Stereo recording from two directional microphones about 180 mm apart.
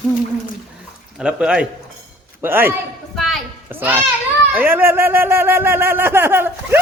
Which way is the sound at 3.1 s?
Centre (ahead or behind).